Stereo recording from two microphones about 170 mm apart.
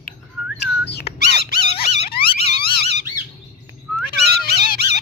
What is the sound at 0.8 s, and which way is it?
Squeak, 80° left.